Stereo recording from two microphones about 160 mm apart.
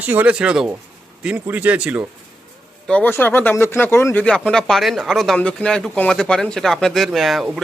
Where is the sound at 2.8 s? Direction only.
10° left (ahead or behind).